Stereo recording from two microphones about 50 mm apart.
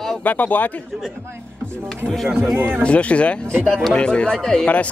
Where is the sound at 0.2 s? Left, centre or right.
Left.